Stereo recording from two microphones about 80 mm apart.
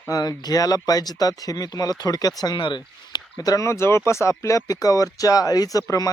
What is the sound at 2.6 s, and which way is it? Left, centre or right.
Speech, left.